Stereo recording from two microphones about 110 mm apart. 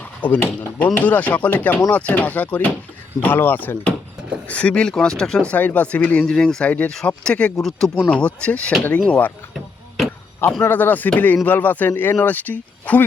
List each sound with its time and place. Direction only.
0.2 s speech: 15° left (ahead or behind)
10.6 s speech: 15° left (ahead or behind)